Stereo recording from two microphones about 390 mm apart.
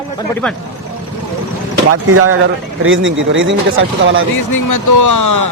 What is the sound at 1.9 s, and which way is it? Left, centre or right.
Speech, right.